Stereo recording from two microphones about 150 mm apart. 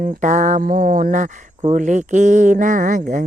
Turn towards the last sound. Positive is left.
turn(degrees=-60)  # may be behind; listen again after turning